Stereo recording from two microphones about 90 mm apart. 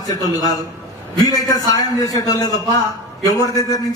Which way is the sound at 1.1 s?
45° left (ahead or behind).